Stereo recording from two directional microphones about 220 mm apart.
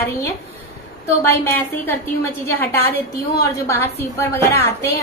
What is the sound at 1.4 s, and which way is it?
A woman's voice, 10° left (ahead or behind).